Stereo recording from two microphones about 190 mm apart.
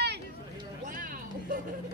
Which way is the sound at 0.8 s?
45° right (ahead or behind).